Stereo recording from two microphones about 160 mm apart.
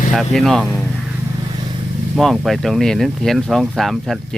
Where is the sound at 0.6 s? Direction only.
5° right (ahead or behind).